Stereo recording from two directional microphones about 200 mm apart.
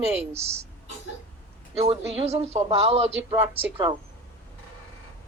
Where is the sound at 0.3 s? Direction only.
30° right (ahead or behind).